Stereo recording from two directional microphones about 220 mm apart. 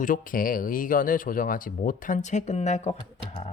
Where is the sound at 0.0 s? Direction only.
40° left (ahead or behind).